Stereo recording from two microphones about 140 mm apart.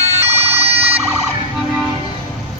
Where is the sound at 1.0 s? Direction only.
15° right (ahead or behind).